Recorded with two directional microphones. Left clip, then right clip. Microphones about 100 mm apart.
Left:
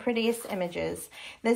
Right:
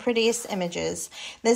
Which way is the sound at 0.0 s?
15° right (ahead or behind).